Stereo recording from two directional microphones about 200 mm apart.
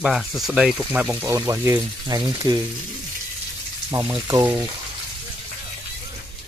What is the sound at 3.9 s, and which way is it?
Speech, 15° right (ahead or behind).